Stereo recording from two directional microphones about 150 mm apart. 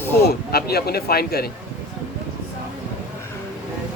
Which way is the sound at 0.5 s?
90° left.